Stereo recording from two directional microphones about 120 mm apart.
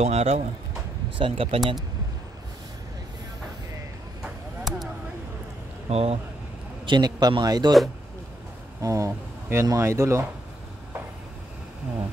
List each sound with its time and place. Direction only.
0.0 s speech: 60° right (ahead or behind)
1.1 s speech: 45° right (ahead or behind)
4.2 s a sound: centre (ahead or behind)
5.9 s speech: 60° right (ahead or behind)
6.9 s speech: 35° right (ahead or behind)
8.8 s speech: 25° right (ahead or behind)